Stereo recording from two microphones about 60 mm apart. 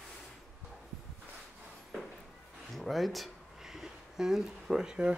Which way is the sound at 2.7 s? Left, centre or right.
Centre.